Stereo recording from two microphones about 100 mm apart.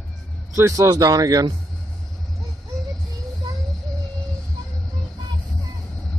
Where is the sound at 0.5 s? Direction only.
30° right (ahead or behind).